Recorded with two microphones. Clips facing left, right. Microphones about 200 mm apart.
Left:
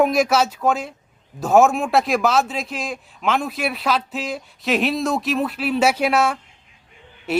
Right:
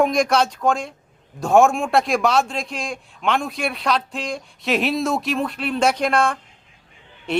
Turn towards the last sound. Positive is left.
turn(degrees=5)  # may be behind; listen again after turning